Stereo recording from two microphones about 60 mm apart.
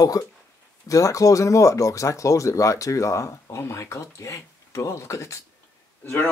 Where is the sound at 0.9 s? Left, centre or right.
Left.